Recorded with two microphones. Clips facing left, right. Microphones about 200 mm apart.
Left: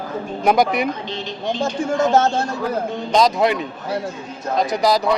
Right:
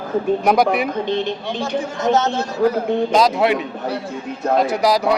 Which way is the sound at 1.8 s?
50° left (ahead or behind).